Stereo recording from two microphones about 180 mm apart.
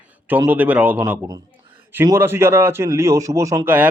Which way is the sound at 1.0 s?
20° right (ahead or behind).